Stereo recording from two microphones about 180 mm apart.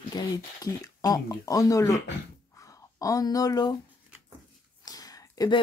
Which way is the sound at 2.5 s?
20° left (ahead or behind).